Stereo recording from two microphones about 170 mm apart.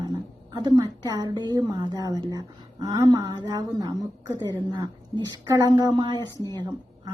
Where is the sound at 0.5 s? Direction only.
25° right (ahead or behind).